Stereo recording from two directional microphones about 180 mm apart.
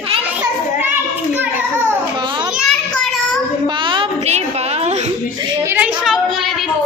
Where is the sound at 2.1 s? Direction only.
25° right (ahead or behind).